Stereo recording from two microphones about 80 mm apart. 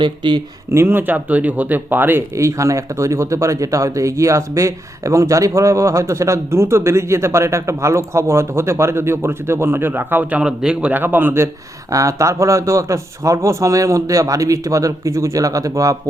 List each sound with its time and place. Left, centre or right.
0.0 s speech: right
0.7 s speech: right
2.3 s speech: right
11.9 s speech: right